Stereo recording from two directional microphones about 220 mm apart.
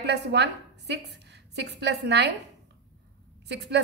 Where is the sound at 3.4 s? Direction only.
50° right (ahead or behind).